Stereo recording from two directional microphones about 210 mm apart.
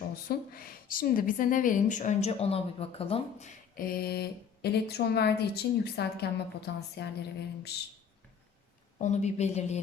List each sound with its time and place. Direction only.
0.1 s a woman's voice: 45° left (ahead or behind)
9.0 s speech: 35° left (ahead or behind)